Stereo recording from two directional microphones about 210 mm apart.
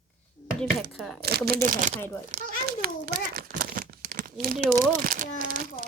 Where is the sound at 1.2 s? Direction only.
50° right (ahead or behind).